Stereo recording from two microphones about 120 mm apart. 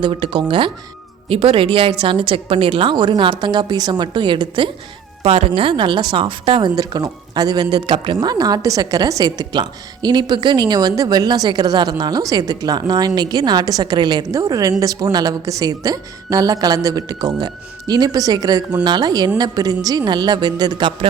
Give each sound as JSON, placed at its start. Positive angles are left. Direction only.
{"t": 0.0, "sound": "a woman's voice", "side_deg": -45}
{"t": 6.7, "sound": "speech", "side_deg": -35}